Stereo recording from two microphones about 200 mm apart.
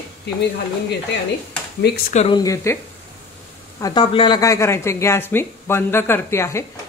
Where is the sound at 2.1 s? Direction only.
25° left (ahead or behind).